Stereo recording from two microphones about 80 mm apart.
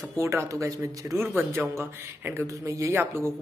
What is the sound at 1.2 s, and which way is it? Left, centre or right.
Speech, right.